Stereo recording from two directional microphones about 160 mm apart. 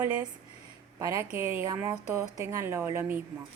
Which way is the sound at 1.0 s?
20° right (ahead or behind).